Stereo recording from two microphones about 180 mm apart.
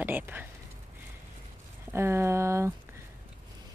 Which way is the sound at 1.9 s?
15° right (ahead or behind).